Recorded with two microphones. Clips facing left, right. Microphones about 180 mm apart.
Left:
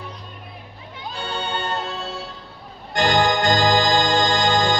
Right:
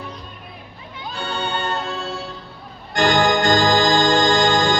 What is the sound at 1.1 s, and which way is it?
Music, 30° left (ahead or behind).